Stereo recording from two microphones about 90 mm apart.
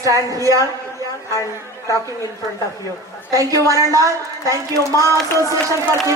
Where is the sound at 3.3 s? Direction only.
40° right (ahead or behind).